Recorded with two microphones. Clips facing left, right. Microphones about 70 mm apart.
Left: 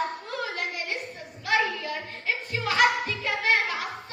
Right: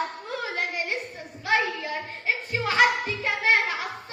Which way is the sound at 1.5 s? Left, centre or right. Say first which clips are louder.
Right 1 dB; right.